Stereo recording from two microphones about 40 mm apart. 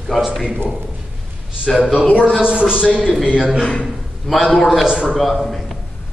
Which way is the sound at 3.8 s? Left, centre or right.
Centre.